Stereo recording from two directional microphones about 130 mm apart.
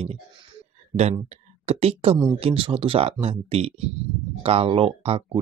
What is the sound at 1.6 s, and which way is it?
Speech, 50° right (ahead or behind).